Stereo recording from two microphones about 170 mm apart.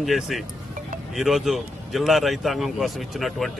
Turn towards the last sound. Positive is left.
turn(degrees=0)  # may be behind; listen again after turning